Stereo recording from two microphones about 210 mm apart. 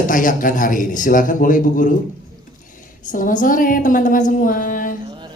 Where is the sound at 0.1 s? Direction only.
40° left (ahead or behind).